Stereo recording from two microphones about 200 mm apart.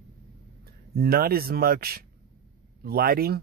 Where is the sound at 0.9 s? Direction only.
50° right (ahead or behind).